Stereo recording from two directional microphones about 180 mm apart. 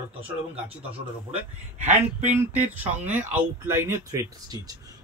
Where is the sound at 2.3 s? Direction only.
10° right (ahead or behind).